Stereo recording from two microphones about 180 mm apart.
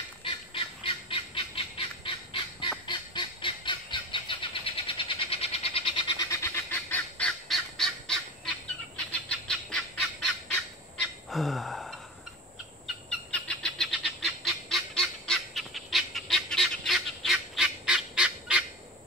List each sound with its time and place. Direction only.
0.2 s goose: 30° left (ahead or behind)
2.9 s vehicle: 25° left (ahead or behind); by 8.2 s centre (ahead or behind)
9.1 s fowl: 5° left (ahead or behind)